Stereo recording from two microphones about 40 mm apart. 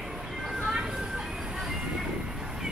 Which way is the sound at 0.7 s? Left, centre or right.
Centre.